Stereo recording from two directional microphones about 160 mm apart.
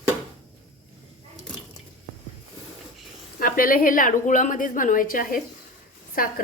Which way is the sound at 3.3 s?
65° left (ahead or behind).